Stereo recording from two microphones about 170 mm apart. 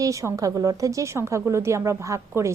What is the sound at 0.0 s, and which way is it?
A woman's voice, 20° right (ahead or behind).